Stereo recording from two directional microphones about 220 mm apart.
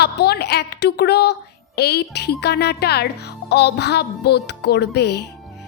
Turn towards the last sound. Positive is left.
turn(degrees=50)  # may be behind; listen again after turning